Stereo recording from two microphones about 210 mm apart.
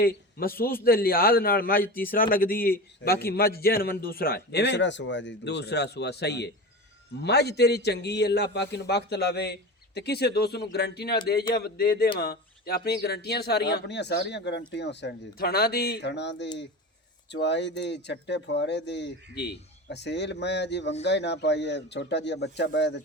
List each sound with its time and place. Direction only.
0.0 s a man's voice: 45° left (ahead or behind)